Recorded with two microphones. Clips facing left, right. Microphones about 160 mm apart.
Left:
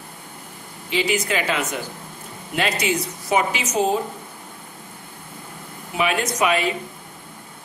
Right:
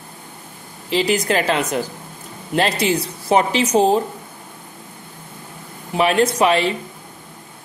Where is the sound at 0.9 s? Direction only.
35° right (ahead or behind).